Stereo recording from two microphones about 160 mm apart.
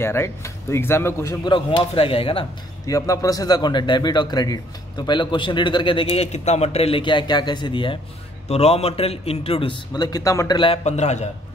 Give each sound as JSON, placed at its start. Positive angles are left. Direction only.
{"t": 0.0, "sound": "speech", "side_deg": 15}
{"t": 1.4, "sound": "a man's voice", "side_deg": 35}
{"t": 2.9, "sound": "a man's voice", "side_deg": 20}